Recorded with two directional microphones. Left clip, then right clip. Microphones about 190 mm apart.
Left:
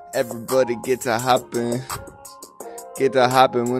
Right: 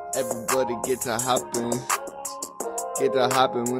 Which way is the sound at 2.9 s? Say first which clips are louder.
Left 5 dB; 35° left (ahead or behind).